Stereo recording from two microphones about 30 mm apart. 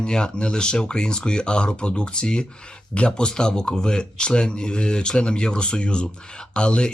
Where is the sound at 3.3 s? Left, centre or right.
Left.